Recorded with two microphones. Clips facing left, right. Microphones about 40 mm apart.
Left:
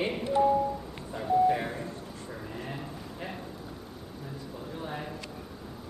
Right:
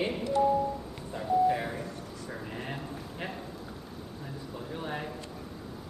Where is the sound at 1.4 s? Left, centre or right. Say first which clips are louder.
Left 1 dB; centre.